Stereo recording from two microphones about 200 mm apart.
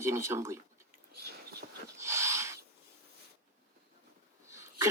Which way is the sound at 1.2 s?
50° right (ahead or behind).